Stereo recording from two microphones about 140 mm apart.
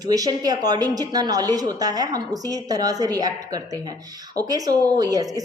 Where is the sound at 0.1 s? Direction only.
25° right (ahead or behind).